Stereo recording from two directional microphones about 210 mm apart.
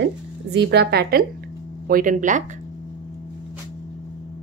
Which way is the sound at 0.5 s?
55° right (ahead or behind).